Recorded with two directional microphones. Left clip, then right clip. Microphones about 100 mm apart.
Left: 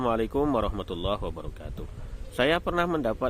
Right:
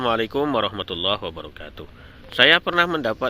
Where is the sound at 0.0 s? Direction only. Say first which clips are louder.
Right 4 dB; 5° left (ahead or behind).